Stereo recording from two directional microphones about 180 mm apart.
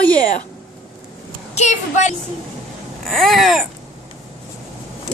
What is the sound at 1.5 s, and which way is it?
Speech, 40° left (ahead or behind).